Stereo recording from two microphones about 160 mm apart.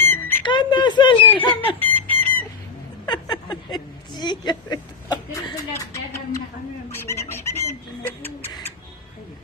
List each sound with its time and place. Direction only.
0.1 s squawk: 10° left (ahead or behind)
0.4 s speech: 30° left (ahead or behind)
1.6 s chicken: 10° left (ahead or behind)
3.1 s a sound: 25° left (ahead or behind)
6.9 s chicken: 15° left (ahead or behind)